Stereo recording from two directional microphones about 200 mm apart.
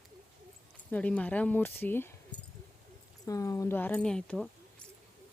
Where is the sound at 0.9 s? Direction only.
5° left (ahead or behind).